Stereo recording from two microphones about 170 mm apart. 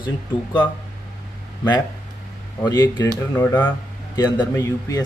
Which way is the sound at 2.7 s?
25° left (ahead or behind).